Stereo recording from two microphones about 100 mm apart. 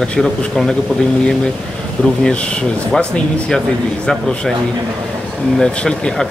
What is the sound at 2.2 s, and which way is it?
Speech, 10° left (ahead or behind).